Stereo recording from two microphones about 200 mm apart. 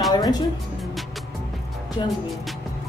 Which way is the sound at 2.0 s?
25° left (ahead or behind).